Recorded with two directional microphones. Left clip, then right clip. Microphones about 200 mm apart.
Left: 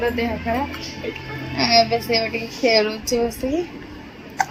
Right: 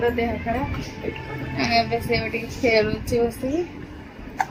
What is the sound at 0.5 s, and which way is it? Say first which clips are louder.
A child's voice: left 3 dB; 25° left (ahead or behind).